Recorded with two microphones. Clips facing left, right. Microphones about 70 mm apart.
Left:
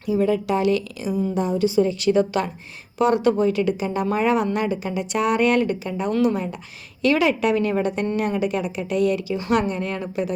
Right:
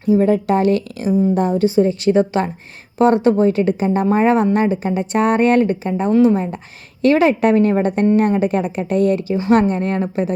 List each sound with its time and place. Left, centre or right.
0.0 s a woman's voice: right